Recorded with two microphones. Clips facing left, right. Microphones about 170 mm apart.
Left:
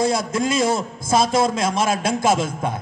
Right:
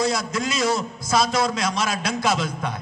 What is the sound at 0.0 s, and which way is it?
A man's voice, 55° left (ahead or behind).